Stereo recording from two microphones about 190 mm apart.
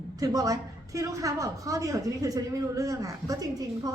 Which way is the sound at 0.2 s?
20° right (ahead or behind).